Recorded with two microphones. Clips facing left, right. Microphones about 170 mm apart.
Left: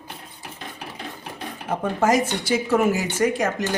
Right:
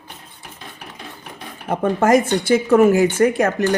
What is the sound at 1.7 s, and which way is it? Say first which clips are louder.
Speech: right 5 dB; 55° right (ahead or behind).